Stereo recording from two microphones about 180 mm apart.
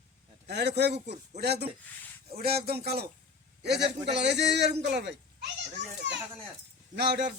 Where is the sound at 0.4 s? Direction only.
70° right (ahead or behind).